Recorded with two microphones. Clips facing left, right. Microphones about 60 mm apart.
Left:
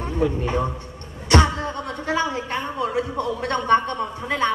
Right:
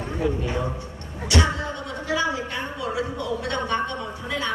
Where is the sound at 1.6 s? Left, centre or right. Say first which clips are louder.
Left 3 dB; left.